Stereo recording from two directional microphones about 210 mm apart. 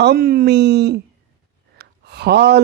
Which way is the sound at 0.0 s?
50° right (ahead or behind).